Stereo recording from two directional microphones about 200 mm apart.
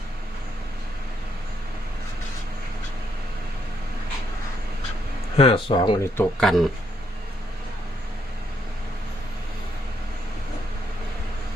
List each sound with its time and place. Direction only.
5.4 s speech: 25° left (ahead or behind)
6.1 s speech: centre (ahead or behind)